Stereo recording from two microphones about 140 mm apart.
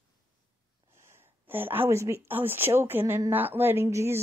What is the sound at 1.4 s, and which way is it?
A woman's voice, 15° right (ahead or behind).